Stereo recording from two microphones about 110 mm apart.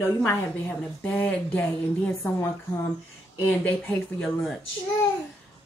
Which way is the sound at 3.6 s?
10° left (ahead or behind).